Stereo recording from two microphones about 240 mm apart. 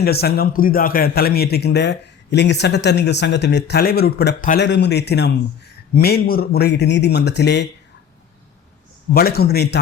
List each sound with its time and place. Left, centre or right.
0.0 s a man's voice: left
9.1 s a man's voice: left